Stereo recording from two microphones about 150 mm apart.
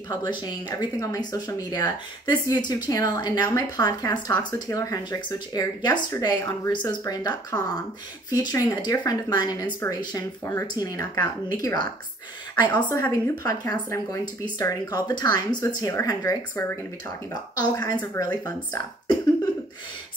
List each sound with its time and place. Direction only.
0.1 s a woman's voice: 30° left (ahead or behind)